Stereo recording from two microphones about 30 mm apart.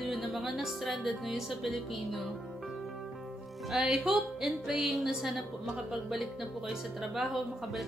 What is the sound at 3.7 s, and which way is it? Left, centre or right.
Music, right.